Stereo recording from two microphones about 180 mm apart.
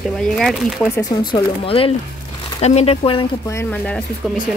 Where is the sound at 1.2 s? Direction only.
30° left (ahead or behind).